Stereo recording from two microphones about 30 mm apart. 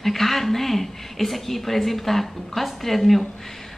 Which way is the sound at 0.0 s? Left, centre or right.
Centre.